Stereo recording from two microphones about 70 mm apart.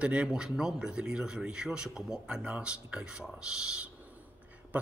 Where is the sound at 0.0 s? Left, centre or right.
Centre.